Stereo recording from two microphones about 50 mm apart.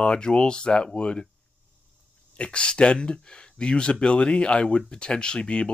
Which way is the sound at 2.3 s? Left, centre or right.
Left.